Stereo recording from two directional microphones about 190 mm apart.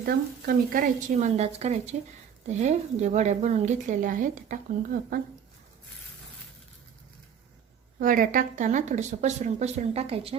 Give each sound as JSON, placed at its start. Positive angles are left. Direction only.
{"t": 0.0, "sound": "speech", "side_deg": -50}
{"t": 7.9, "sound": "speech", "side_deg": -45}